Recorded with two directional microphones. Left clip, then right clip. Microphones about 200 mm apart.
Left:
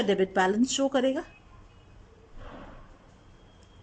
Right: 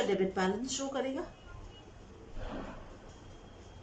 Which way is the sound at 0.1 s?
50° left (ahead or behind).